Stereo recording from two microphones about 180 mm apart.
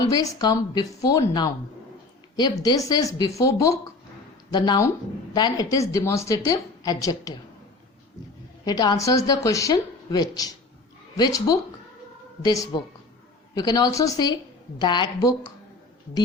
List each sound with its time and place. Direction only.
0.0 s a woman's voice: 20° left (ahead or behind)
8.6 s a woman's voice: 20° left (ahead or behind)